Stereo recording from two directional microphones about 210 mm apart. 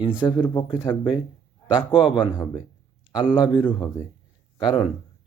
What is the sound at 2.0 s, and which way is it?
Speech, 25° left (ahead or behind).